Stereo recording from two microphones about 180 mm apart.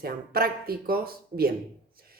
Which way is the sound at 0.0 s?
55° right (ahead or behind).